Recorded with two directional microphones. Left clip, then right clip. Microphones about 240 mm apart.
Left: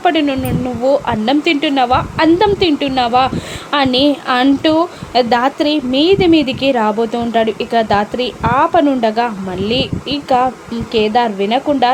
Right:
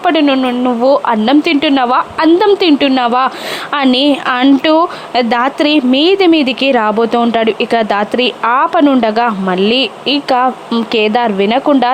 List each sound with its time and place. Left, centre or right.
0.0 s speech: centre